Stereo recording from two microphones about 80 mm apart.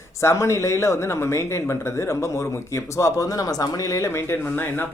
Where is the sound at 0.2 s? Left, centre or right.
Left.